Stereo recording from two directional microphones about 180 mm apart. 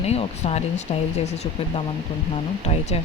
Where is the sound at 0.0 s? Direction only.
35° left (ahead or behind).